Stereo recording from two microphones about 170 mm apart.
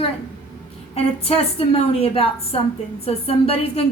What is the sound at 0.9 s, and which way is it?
A woman's voice, 35° left (ahead or behind).